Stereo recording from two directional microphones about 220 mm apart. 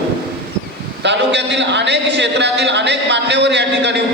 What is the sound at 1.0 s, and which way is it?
A man's voice, 50° right (ahead or behind).